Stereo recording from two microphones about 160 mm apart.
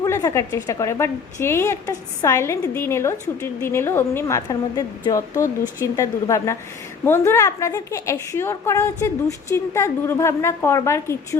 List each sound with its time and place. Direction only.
0.0 s a woman's voice: 20° left (ahead or behind)